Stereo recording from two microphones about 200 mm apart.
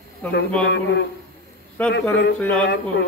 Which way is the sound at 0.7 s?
60° left (ahead or behind).